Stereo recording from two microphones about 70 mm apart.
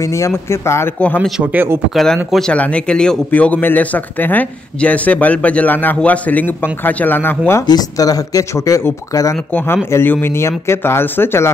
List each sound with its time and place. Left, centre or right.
0.0 s speech: left
0.9 s a man's voice: left
1.4 s speech: right
2.5 s speech: centre
3.3 s a man's voice: left
7.6 s speech: left
9.5 s a man's voice: left
9.8 s speech: left